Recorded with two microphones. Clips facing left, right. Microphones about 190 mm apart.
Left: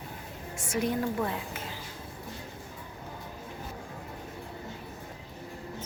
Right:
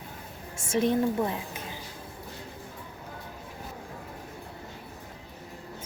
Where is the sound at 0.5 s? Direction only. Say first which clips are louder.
Right 5 dB; 25° right (ahead or behind).